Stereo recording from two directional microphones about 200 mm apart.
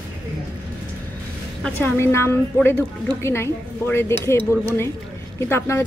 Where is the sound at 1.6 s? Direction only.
10° left (ahead or behind).